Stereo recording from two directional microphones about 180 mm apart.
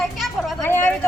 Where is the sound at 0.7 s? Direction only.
15° left (ahead or behind).